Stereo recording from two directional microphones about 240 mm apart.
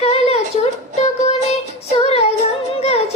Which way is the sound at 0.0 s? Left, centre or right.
Left.